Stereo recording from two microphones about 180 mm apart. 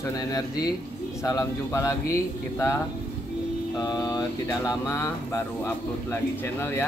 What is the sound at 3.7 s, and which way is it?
Speech, 20° left (ahead or behind).